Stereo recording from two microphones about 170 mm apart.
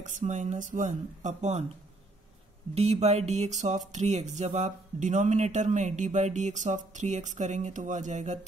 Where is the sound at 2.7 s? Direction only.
40° right (ahead or behind).